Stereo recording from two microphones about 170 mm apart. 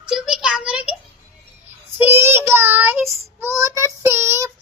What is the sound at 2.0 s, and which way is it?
Child singing, 15° right (ahead or behind).